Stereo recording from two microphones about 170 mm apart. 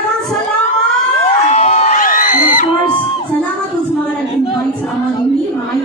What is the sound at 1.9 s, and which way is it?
Music, 55° left (ahead or behind).